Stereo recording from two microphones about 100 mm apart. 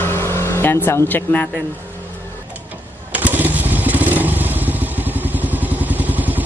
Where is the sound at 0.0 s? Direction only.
25° left (ahead or behind).